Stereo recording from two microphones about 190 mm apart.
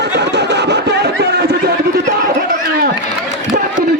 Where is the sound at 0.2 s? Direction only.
65° right (ahead or behind).